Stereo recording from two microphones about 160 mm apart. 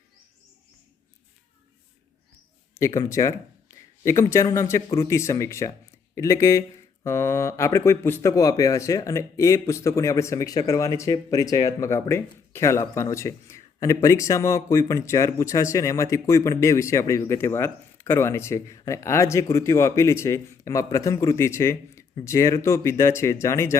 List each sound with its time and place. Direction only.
2.7 s speech: 20° left (ahead or behind)